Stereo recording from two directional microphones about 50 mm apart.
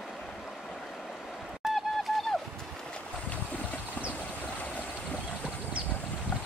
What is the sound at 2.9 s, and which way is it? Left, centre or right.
Stream, left.